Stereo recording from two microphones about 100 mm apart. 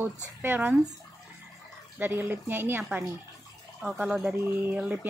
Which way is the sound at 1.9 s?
20° right (ahead or behind).